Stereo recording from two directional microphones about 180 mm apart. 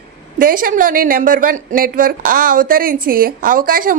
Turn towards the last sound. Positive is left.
turn(degrees=-50)  # may be behind; listen again after turning